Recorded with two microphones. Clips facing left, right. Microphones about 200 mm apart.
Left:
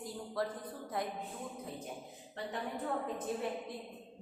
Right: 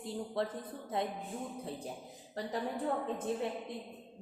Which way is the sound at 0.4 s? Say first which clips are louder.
Left 1 dB; 25° right (ahead or behind).